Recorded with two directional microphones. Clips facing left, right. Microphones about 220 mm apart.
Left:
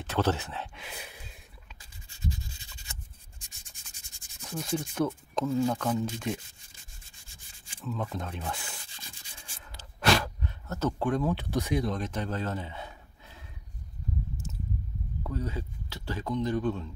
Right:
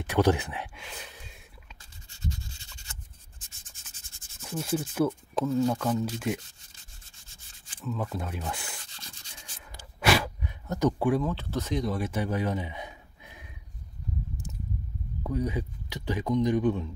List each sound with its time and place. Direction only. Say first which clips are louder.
0.0 s speech: right 4 dB; 15° right (ahead or behind)
0.7 s a sound: even; 5° left (ahead or behind)
2.0 s rub: left 1 dB; 15° left (ahead or behind)
3.4 s sanding: even; 15° left (ahead or behind)
4.7 s speech: right 3 dB; 5° right (ahead or behind)
5.4 s speech: right 1 dB; 10° left (ahead or behind)
5.7 s speech: right 2 dB; centre (ahead or behind)
7.8 s speech: right 1 dB; 5° right (ahead or behind)
8.9 s rub: right 1 dB; 15° left (ahead or behind)
9.7 s a sound: right 1 dB; 10° right (ahead or behind)
11.2 s speech: left 2 dB; 15° left (ahead or behind)
11.8 s speech: right 2 dB; 10° right (ahead or behind)
14.5 s a sound: left 1 dB; 15° right (ahead or behind)
15.2 s speech: right 5 dB; 15° right (ahead or behind)